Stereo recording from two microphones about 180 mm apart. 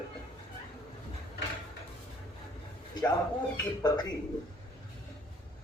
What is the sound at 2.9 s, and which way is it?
Speech, 25° left (ahead or behind).